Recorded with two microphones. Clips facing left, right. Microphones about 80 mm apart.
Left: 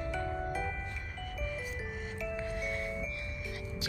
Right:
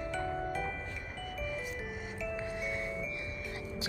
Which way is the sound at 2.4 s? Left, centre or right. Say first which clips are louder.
Left 1 dB; centre.